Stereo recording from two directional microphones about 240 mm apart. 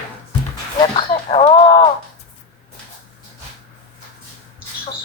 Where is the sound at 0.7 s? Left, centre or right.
Left.